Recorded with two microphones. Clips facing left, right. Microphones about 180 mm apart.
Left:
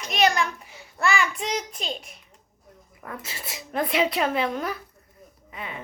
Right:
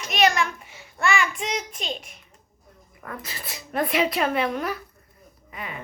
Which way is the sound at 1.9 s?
Centre (ahead or behind).